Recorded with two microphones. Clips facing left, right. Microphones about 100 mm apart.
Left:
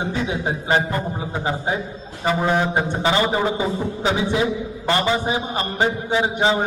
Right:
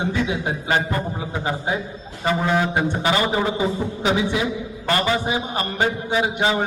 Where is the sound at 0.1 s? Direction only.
30° left (ahead or behind).